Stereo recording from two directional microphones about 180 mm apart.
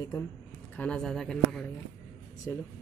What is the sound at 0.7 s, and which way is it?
Speech, 5° left (ahead or behind).